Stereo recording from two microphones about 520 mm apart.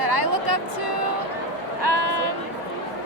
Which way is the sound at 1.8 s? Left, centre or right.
Right.